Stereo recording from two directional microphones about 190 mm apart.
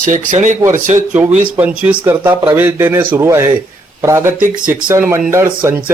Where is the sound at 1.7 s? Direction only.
5° right (ahead or behind); by 5.0 s 25° right (ahead or behind).